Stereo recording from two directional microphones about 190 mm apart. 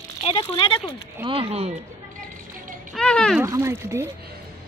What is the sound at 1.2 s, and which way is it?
Speech, 30° right (ahead or behind).